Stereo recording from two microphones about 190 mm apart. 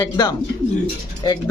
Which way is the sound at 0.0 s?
20° left (ahead or behind).